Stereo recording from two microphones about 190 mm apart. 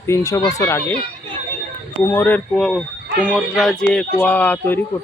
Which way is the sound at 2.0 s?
10° left (ahead or behind).